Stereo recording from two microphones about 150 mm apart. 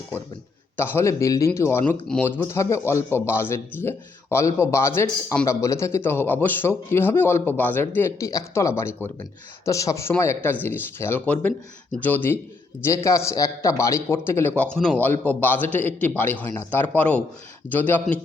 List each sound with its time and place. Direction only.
0.8 s a man's voice: 20° left (ahead or behind)
1.8 s a man's voice: 5° left (ahead or behind)
14.6 s a man's voice: 5° left (ahead or behind)